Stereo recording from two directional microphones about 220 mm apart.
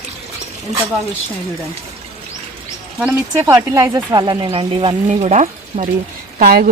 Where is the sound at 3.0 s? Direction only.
5° right (ahead or behind).